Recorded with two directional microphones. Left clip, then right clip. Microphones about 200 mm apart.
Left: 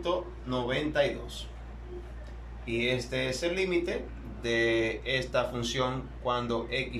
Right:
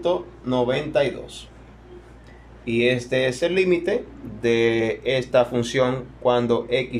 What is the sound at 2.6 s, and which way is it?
Speech, 45° right (ahead or behind).